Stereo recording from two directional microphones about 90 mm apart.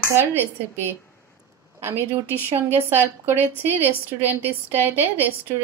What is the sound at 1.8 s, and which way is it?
A woman's voice, 30° right (ahead or behind).